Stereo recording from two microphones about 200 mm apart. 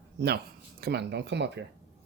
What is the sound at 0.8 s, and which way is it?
Speech, 55° right (ahead or behind).